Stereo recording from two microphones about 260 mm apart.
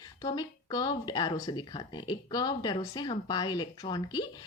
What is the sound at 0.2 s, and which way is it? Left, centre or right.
A woman's voice, centre.